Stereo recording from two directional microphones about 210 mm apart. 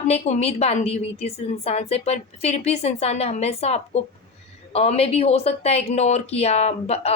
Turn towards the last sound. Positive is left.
turn(degrees=30)  # may be behind; listen again after turning